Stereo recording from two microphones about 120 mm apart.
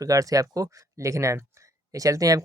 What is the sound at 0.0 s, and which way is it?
Speech, 30° right (ahead or behind).